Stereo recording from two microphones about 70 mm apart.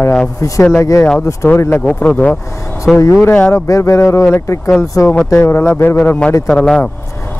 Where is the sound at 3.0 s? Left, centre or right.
Left.